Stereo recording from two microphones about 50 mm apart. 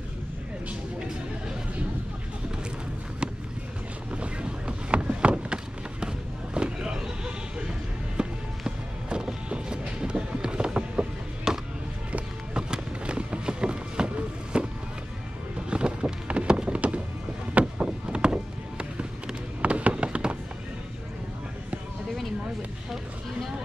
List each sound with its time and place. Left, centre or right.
4.1 s boat: right
6.5 s vehicle: centre
8.2 s music: centre
12.1 s run: centre
15.7 s a sound: right